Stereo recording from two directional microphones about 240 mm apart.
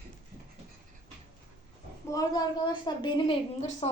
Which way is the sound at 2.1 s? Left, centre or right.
Centre.